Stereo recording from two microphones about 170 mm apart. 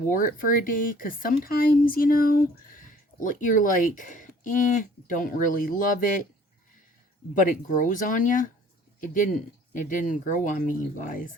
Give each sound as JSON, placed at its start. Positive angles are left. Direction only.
{"t": 0.1, "sound": "speech", "side_deg": 50}
{"t": 7.3, "sound": "speech", "side_deg": 50}